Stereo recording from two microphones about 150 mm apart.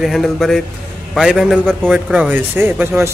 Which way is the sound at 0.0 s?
Centre (ahead or behind).